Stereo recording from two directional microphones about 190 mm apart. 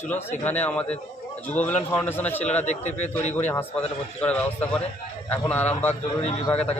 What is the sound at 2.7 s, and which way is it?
Speech, 35° left (ahead or behind).